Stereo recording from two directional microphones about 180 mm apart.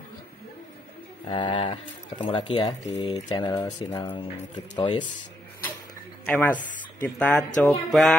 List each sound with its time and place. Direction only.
1.3 s speech: 30° left (ahead or behind)
6.2 s speech: 10° left (ahead or behind)